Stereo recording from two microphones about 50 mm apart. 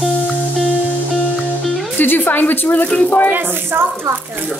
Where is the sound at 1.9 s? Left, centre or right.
Left.